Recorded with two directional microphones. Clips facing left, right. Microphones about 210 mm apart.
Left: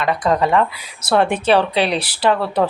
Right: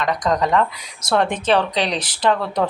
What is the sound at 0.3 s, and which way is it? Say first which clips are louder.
Speech: left 2 dB; 10° left (ahead or behind).